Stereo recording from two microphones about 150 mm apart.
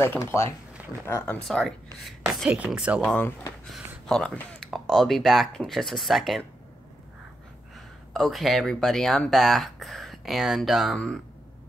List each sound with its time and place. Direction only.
0.0 s speech: 15° left (ahead or behind)
2.2 s speech: 10° right (ahead or behind)
3.0 s speech: 10° left (ahead or behind)
8.1 s speech: centre (ahead or behind)